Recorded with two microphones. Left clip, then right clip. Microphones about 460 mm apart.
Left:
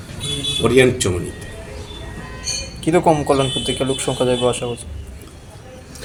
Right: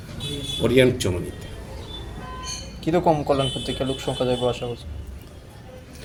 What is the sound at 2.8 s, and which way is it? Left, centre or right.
Speech, right.